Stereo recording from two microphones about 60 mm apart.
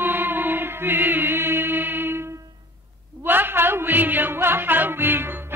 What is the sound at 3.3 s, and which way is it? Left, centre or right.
Music, right.